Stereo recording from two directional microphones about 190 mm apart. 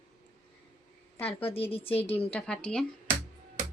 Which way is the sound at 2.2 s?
5° left (ahead or behind).